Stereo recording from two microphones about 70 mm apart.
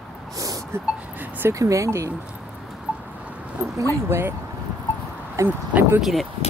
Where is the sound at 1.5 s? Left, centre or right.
Right.